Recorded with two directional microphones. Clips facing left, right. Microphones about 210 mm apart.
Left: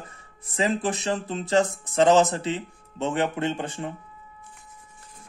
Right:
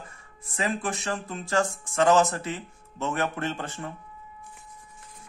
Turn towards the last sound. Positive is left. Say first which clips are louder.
# left 4 dB
turn(degrees=20)  # may be behind; listen again after turning